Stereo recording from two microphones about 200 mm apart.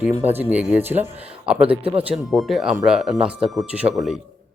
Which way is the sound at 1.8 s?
30° right (ahead or behind).